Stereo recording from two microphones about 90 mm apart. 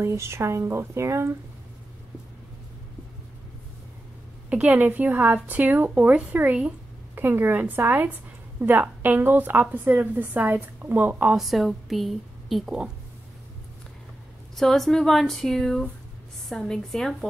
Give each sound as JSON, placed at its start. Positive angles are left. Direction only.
{"t": 0.0, "sound": "speech", "side_deg": -30}
{"t": 4.5, "sound": "a woman's voice", "side_deg": -15}
{"t": 11.3, "sound": "a woman's voice", "side_deg": 0}
{"t": 14.6, "sound": "speech", "side_deg": 5}